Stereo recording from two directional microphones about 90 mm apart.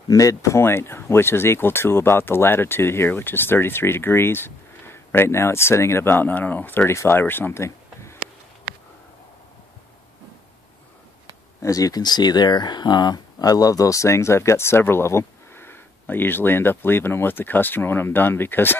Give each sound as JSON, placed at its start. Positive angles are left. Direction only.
{"t": 0.1, "sound": "speech", "side_deg": 40}
{"t": 11.6, "sound": "speech", "side_deg": 40}